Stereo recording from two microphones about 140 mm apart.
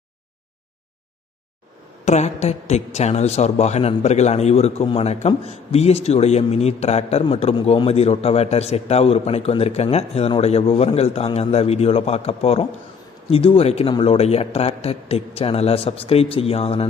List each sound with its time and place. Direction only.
2.0 s a woman's voice: 50° left (ahead or behind)